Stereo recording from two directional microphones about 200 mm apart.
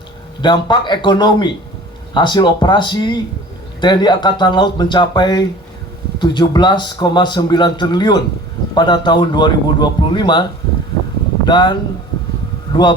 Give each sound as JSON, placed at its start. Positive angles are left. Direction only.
{"t": 0.4, "sound": "speech", "side_deg": 20}
{"t": 11.4, "sound": "speech", "side_deg": 20}